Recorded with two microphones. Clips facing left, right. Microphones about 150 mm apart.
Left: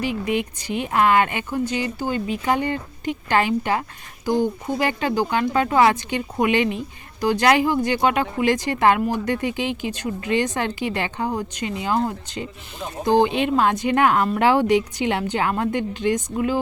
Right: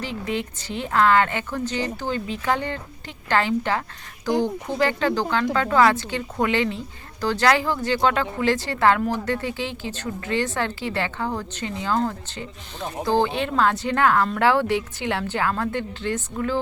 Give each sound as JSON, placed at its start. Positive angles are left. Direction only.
{"t": 0.0, "sound": "a woman's voice", "side_deg": 15}